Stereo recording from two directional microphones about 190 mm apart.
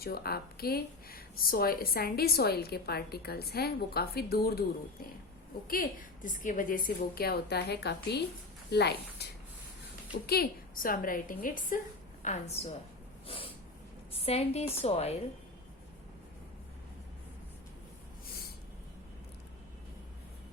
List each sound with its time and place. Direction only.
0.0 s speech: 55° left (ahead or behind)
5.6 s a woman's voice: 50° left (ahead or behind)
10.2 s a woman's voice: 55° left (ahead or behind); by 12.7 s 35° left (ahead or behind)
13.2 s snort: 30° left (ahead or behind)
14.1 s a woman's voice: 35° left (ahead or behind)